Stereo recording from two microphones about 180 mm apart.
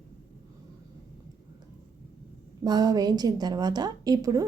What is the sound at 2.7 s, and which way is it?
A woman's voice, 20° right (ahead or behind).